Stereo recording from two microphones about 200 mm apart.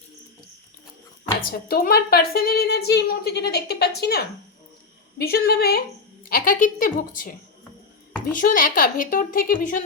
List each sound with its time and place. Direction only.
1.5 s a woman's voice: 45° left (ahead or behind)
8.3 s a woman's voice: 40° left (ahead or behind)